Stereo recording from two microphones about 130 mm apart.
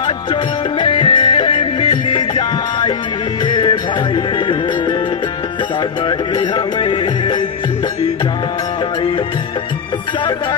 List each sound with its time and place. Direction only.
0.0 s music: 35° left (ahead or behind)
6.0 s music: 35° left (ahead or behind)